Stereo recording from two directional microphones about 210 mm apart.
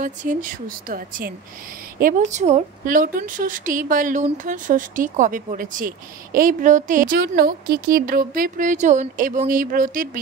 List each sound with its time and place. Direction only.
0.0 s a woman's voice: 40° right (ahead or behind)